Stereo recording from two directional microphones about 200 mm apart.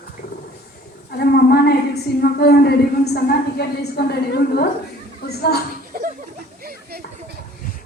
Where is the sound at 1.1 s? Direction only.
55° left (ahead or behind).